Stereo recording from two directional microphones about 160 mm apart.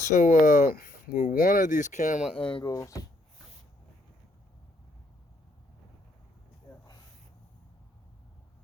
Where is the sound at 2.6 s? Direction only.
20° left (ahead or behind).